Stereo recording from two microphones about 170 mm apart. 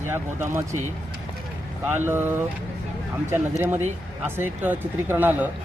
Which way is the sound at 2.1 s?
15° right (ahead or behind).